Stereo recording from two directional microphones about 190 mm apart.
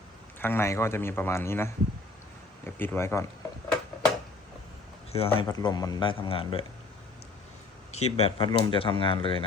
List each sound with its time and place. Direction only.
0.3 s speech: 10° left (ahead or behind)
5.1 s speech: 30° left (ahead or behind)
7.9 s speech: 35° left (ahead or behind)